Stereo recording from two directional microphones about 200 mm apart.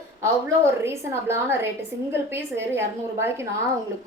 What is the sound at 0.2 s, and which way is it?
A woman's voice, 15° right (ahead or behind).